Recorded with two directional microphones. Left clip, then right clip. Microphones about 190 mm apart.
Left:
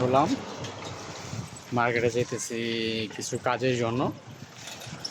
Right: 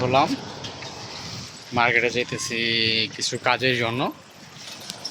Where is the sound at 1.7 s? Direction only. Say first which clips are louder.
Right 5 dB; centre (ahead or behind).